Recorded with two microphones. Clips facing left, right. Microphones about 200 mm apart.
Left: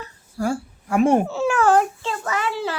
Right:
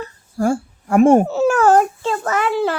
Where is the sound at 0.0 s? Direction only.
50° right (ahead or behind).